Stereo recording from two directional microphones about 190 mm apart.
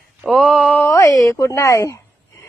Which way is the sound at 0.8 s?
15° left (ahead or behind).